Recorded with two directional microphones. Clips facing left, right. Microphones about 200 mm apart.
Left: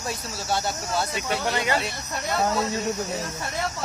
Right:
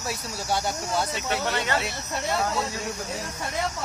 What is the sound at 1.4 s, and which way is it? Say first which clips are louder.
Speech: left 3 dB; 10° left (ahead or behind).